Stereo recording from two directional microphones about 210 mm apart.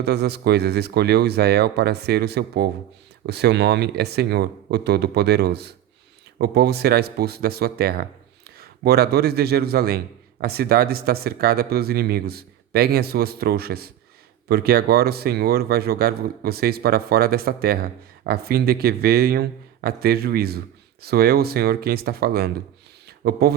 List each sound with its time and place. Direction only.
0.0 s speech: 50° right (ahead or behind)